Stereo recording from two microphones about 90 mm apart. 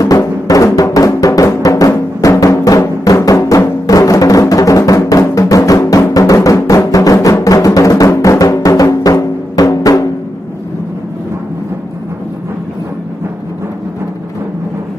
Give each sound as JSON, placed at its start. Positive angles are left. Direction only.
{"t": 0.0, "sound": "music", "side_deg": 40}